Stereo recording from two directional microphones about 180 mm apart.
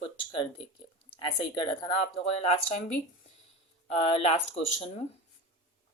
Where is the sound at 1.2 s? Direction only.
25° left (ahead or behind).